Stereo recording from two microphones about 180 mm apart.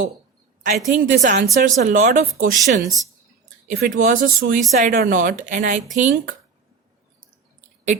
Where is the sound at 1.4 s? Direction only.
45° right (ahead or behind).